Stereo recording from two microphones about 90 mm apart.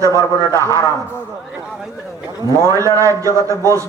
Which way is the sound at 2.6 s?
40° right (ahead or behind).